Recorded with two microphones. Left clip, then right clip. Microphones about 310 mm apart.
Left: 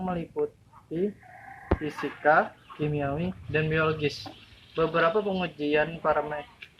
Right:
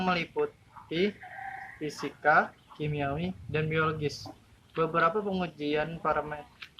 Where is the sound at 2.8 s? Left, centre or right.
Centre.